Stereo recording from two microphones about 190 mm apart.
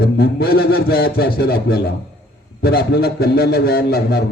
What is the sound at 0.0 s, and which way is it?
A man's voice, 55° left (ahead or behind).